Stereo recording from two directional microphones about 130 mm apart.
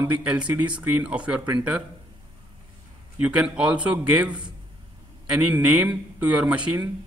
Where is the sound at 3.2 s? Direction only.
10° right (ahead or behind).